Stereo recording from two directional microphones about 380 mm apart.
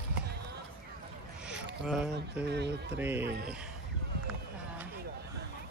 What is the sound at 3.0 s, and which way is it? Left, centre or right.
Speech, centre.